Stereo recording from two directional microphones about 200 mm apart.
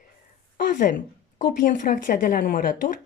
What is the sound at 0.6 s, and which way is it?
A woman's voice, 40° left (ahead or behind).